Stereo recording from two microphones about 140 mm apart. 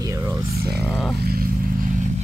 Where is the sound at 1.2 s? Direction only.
90° right.